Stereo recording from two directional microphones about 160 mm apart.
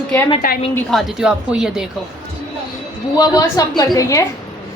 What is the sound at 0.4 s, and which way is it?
Speech, 65° left (ahead or behind).